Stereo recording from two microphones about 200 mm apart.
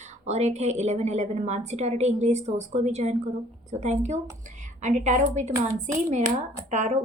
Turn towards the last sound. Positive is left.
turn(degrees=-35)  # may be behind; listen again after turning